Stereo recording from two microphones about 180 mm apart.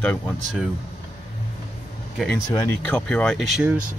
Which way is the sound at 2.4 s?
15° left (ahead or behind).